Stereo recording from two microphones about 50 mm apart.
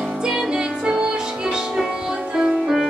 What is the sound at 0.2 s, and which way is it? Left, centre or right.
Music, centre.